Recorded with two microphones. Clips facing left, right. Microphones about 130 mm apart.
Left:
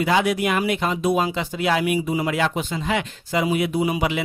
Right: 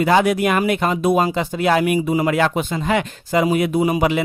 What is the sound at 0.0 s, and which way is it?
Speech, 50° right (ahead or behind).